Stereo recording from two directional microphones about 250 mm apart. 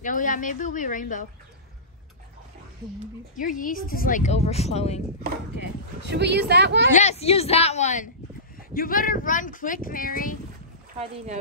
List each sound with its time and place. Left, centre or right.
0.0 s speech: left
3.3 s speech: left
6.0 s speech: right
6.9 s speech: left
11.0 s speech: right